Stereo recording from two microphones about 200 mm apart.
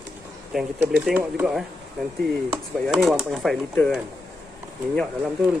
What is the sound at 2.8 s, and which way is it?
Speech, centre (ahead or behind).